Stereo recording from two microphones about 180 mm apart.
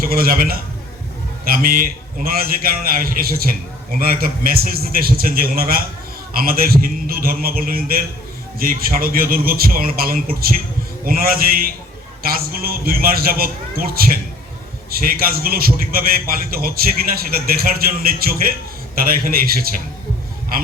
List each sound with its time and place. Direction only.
0.0 s a man's voice: 55° right (ahead or behind)